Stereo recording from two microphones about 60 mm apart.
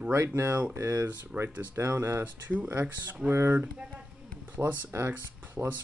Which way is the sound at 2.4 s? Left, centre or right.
Right.